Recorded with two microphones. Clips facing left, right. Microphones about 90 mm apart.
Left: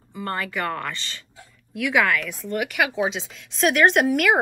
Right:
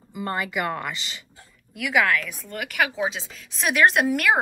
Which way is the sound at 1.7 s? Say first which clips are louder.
Left 1 dB; centre (ahead or behind).